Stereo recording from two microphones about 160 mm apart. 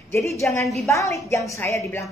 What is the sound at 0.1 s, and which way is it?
A woman's voice, 15° left (ahead or behind).